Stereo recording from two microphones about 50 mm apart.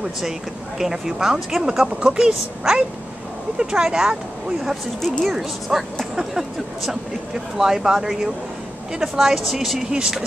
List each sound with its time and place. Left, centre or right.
0.7 s speech: centre
1.9 s speech: centre
5.2 s speech: centre
7.5 s speech: centre
9.8 s speech: centre